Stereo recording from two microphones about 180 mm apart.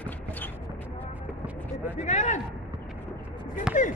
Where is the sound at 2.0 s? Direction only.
40° left (ahead or behind).